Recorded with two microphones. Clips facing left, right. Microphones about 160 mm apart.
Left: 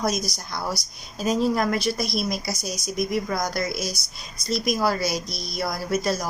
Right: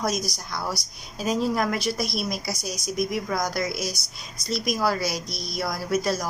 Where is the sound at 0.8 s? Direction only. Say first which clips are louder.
Even; 35° right (ahead or behind).